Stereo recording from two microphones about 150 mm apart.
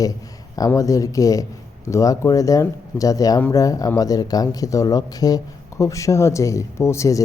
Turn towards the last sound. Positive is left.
turn(degrees=20)  # may be behind; listen again after turning